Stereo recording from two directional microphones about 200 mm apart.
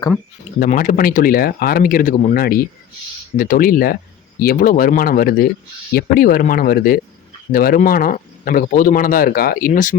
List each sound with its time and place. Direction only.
0.6 s speech: 40° left (ahead or behind)